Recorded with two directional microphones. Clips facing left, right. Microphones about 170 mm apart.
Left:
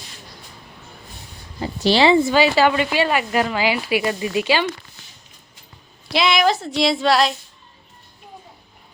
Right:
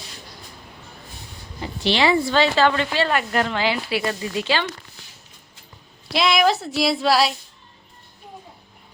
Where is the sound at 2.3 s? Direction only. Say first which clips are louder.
Left 2 dB; 10° left (ahead or behind).